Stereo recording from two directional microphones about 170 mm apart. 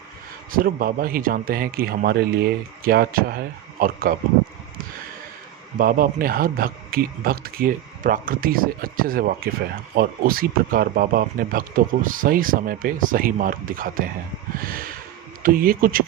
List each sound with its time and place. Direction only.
0.5 s speech: 55° right (ahead or behind)
5.7 s speech: 55° right (ahead or behind)
14.6 s snort: 55° right (ahead or behind)
15.4 s speech: 55° right (ahead or behind)